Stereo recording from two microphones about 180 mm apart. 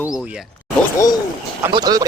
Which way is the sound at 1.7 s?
20° right (ahead or behind).